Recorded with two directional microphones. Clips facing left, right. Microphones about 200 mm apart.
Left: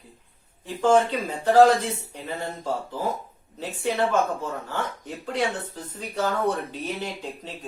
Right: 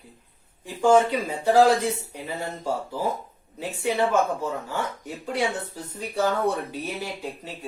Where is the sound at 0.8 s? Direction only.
10° right (ahead or behind).